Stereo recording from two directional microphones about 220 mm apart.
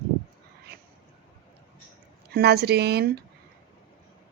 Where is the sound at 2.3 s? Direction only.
50° right (ahead or behind).